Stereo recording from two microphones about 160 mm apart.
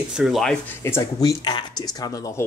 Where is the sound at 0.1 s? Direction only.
Centre (ahead or behind).